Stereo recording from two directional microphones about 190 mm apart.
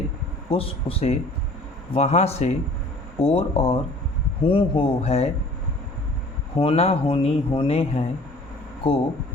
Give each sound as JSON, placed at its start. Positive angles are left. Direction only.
{"t": 0.5, "sound": "speech", "side_deg": 30}
{"t": 6.6, "sound": "speech", "side_deg": 30}